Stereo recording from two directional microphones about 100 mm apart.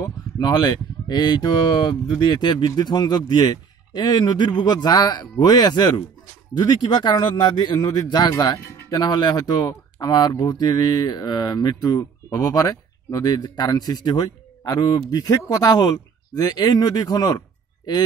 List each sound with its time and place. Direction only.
0.4 s speech: 45° left (ahead or behind)